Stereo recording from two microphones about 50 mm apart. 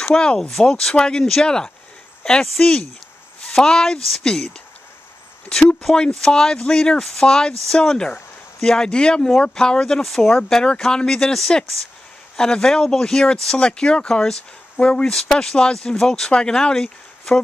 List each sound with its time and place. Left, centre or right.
0.0 s speech: centre
5.5 s speech: centre
10.0 s speech: centre; by 15.1 s left
15.1 s speech: centre